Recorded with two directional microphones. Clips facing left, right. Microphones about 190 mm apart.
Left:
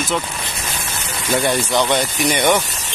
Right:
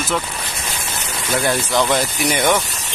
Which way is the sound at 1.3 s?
Centre (ahead or behind).